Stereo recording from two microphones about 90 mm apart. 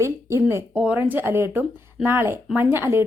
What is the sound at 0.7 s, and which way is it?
Speech, 15° right (ahead or behind).